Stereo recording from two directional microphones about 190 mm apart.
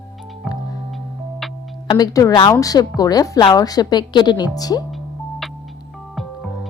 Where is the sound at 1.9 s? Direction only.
20° left (ahead or behind).